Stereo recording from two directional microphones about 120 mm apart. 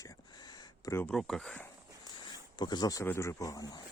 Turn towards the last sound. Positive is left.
turn(degrees=30)  # may be behind; listen again after turning